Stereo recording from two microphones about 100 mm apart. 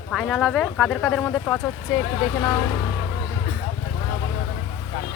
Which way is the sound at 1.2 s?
15° left (ahead or behind).